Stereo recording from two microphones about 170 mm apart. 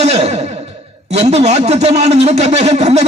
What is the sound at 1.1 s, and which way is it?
A man's voice, 40° right (ahead or behind).